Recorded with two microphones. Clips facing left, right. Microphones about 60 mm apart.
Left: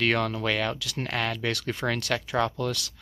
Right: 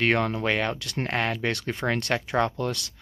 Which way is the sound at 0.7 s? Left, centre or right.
Right.